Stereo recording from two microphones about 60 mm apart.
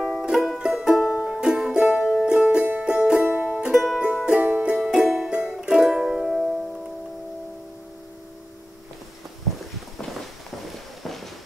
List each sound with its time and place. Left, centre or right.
0.2 s music: centre
3.7 s music: centre
4.0 s music: centre
11.0 s clip-clop: centre